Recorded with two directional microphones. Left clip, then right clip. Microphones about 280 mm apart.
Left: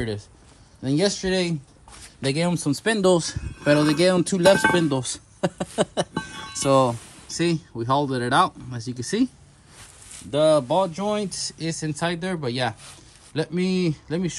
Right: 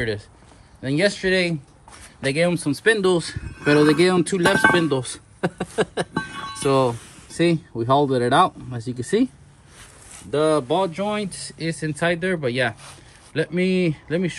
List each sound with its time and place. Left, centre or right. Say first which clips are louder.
0.8 s speech: right 3 dB; centre
1.5 s a sound: right 2 dB; centre
2.3 s speech: right 6 dB; centre
6.1 s music: right 4 dB; centre
6.6 s speech: even; centre
7.3 s speech: right 4 dB; centre
8.8 s speech: right 2 dB; centre
10.3 s speech: left 1 dB; left